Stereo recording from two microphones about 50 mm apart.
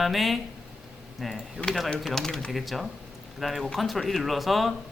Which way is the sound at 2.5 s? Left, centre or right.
Centre.